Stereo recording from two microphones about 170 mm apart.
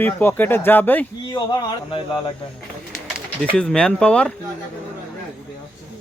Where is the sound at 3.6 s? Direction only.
5° left (ahead or behind).